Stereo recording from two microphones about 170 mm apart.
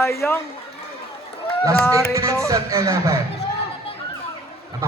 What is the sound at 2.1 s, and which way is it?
Speech, 20° right (ahead or behind).